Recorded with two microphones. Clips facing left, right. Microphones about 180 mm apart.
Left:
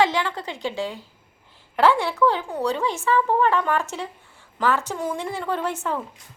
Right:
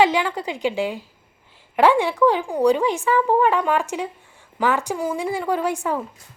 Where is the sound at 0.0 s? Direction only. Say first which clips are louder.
Right 3 dB; 15° right (ahead or behind).